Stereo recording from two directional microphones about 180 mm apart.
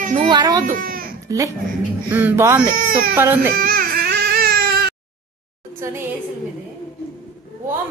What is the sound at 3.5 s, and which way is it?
Baby cry, 55° right (ahead or behind).